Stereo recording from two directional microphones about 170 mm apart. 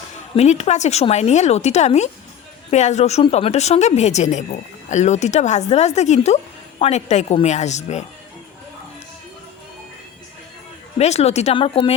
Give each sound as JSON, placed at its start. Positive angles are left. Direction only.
{"t": 0.3, "sound": "a woman's voice", "side_deg": 40}
{"t": 10.9, "sound": "a woman's voice", "side_deg": 40}